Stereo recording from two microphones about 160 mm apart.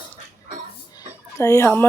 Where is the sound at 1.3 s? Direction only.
20° left (ahead or behind).